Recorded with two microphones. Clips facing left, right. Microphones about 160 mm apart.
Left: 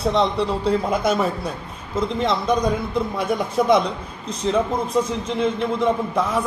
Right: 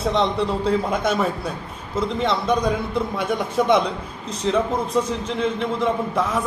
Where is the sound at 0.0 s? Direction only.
Centre (ahead or behind).